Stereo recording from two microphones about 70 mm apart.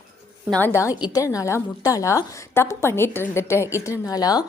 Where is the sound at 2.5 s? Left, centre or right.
Left.